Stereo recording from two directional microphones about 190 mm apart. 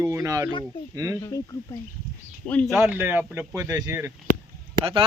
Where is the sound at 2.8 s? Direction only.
10° right (ahead or behind).